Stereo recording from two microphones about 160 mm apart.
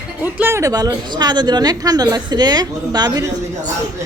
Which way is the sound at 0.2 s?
15° right (ahead or behind).